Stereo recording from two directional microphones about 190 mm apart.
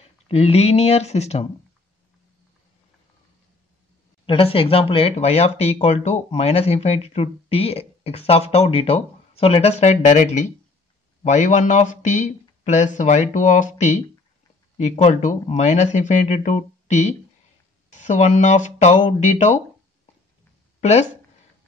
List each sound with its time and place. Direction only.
0.3 s speech: 35° left (ahead or behind)
4.3 s speech: 30° left (ahead or behind)
20.8 s speech: 35° left (ahead or behind)